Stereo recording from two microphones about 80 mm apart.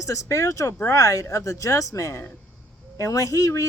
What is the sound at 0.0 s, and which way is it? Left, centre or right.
Speech, left.